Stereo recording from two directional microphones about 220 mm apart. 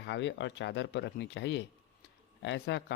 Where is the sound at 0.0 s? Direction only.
55° left (ahead or behind).